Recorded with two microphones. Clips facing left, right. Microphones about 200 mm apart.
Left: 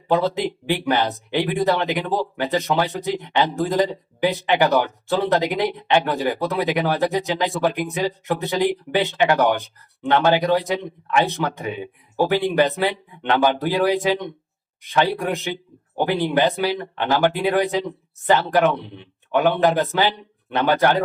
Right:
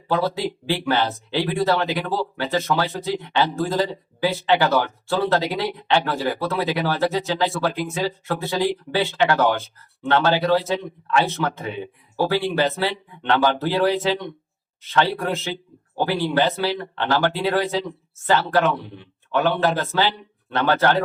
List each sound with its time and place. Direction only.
0.1 s speech: 20° left (ahead or behind)